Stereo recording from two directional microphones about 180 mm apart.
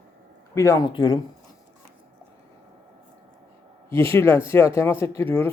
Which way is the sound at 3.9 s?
15° left (ahead or behind).